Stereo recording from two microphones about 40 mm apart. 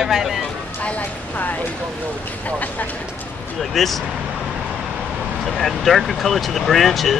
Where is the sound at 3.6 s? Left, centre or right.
Centre.